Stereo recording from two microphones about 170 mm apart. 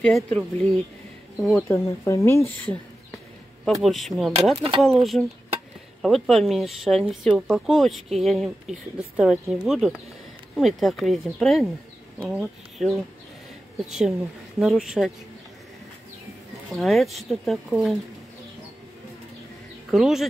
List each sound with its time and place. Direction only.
0.0 s speech: 5° left (ahead or behind)
1.6 s speech: 15° left (ahead or behind)
3.6 s speech: centre (ahead or behind)
16.7 s speech: centre (ahead or behind)
19.9 s speech: centre (ahead or behind)